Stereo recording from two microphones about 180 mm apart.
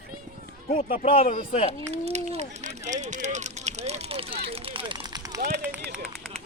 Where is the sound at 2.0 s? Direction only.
35° right (ahead or behind); by 5.4 s 20° right (ahead or behind).